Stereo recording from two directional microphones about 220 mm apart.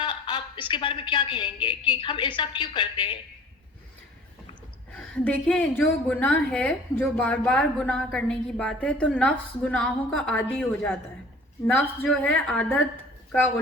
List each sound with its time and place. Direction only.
0.0 s a sound: 20° left (ahead or behind)
2.0 s a woman's voice: 20° left (ahead or behind)
4.9 s a woman's voice: 5° left (ahead or behind)